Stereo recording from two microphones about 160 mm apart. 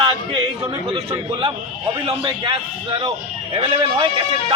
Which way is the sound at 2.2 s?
30° right (ahead or behind).